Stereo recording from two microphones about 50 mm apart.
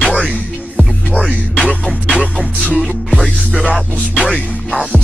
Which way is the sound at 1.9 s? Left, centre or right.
Right.